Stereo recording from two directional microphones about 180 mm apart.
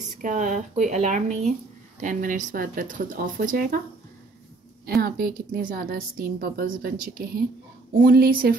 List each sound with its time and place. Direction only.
0.2 s speech: 45° right (ahead or behind)
4.8 s a woman's voice: 55° right (ahead or behind)